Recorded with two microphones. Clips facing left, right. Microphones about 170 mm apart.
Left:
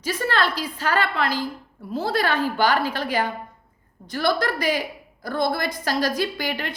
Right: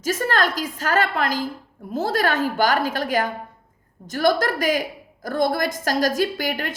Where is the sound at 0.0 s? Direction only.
45° right (ahead or behind).